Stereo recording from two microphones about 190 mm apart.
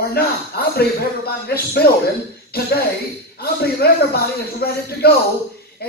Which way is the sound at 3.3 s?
55° left (ahead or behind).